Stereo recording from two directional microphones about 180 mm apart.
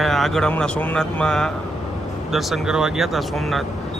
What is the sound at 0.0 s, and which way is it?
Speech, centre (ahead or behind).